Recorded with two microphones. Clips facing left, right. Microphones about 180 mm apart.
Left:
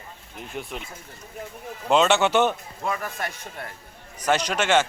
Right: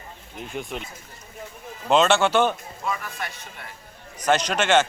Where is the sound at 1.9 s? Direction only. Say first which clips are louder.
Right 1 dB; 10° left (ahead or behind).